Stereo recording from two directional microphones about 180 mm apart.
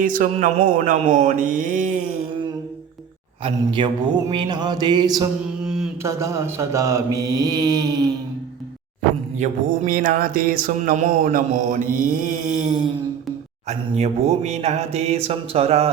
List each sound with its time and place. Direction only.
0.0 s music: 45° right (ahead or behind)
3.4 s mantra: 30° right (ahead or behind)
5.6 s mantra: 5° right (ahead or behind)
6.0 s mantra: 15° right (ahead or behind)
9.4 s music: 50° right (ahead or behind)
13.7 s speech: 35° right (ahead or behind)